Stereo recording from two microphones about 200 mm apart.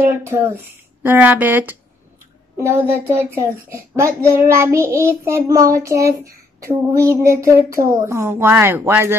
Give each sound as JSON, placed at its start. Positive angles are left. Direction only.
{"t": 0.2, "sound": "a child's voice", "side_deg": -10}